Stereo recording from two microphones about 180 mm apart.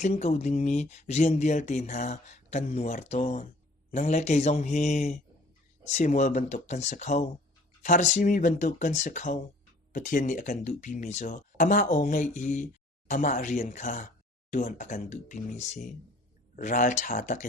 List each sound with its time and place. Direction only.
0.0 s speech: 40° left (ahead or behind)